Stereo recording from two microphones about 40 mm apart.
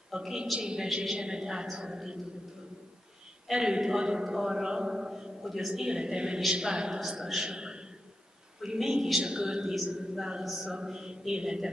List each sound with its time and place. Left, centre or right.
0.1 s a man's voice: centre
3.4 s a man's voice: centre
7.3 s a sound: centre
8.5 s a man's voice: centre